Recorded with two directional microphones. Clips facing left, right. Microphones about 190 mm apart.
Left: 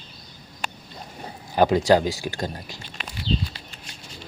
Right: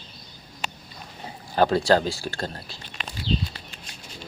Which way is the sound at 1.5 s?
15° left (ahead or behind).